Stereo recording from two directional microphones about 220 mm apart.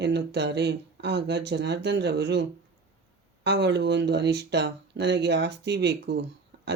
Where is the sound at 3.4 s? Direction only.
50° right (ahead or behind).